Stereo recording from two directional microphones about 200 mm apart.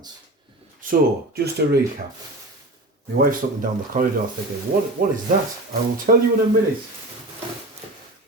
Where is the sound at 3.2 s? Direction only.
45° right (ahead or behind).